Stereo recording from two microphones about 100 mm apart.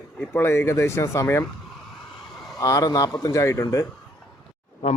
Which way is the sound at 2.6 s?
35° left (ahead or behind).